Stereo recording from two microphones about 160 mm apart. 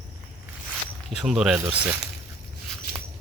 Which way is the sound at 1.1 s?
5° right (ahead or behind).